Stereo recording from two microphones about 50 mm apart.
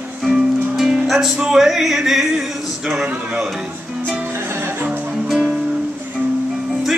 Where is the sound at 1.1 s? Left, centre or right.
Centre.